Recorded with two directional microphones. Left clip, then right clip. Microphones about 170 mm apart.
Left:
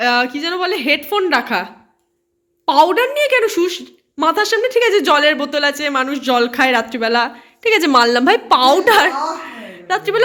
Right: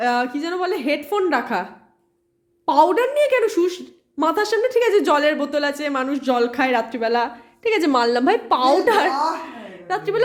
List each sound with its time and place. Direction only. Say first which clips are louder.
0.0 s speech: left 5 dB; 15° right (ahead or behind)